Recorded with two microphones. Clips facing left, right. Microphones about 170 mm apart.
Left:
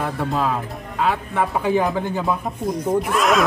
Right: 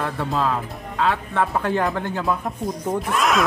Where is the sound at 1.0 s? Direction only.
10° left (ahead or behind).